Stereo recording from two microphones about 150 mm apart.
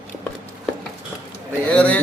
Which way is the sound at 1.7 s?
10° left (ahead or behind).